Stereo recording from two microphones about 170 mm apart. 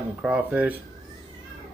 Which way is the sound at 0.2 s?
5° right (ahead or behind).